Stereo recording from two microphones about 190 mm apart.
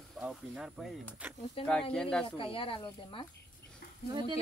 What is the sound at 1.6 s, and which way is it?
Speech, 5° left (ahead or behind).